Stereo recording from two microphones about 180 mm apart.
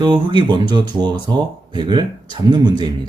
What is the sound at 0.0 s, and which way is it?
Speech, 25° right (ahead or behind).